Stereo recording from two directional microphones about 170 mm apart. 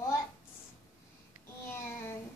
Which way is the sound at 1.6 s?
15° left (ahead or behind).